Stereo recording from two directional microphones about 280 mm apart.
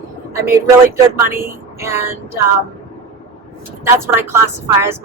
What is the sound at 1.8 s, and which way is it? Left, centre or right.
Speech, centre.